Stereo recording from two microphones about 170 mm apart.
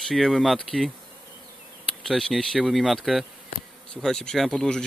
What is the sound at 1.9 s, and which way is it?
Speech, centre (ahead or behind).